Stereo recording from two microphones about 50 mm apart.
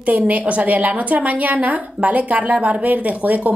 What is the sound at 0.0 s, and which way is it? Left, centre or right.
A woman's voice, right.